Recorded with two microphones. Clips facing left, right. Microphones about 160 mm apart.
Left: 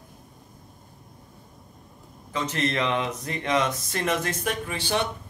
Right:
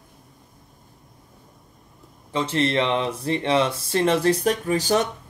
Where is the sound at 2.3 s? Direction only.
30° right (ahead or behind).